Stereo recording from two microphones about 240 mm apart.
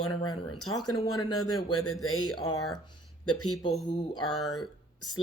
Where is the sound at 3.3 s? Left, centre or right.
Left.